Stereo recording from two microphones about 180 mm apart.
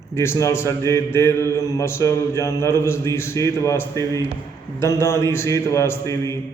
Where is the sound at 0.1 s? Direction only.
15° left (ahead or behind).